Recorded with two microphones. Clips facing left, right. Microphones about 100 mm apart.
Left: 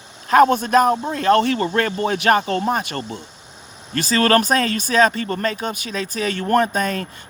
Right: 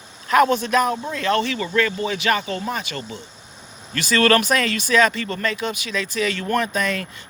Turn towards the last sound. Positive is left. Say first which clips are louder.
# left 4 dB
turn(degrees=40)  # may be behind; listen again after turning